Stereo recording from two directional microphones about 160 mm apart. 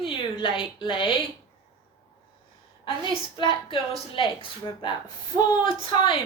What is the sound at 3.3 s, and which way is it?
A woman's voice, 30° left (ahead or behind).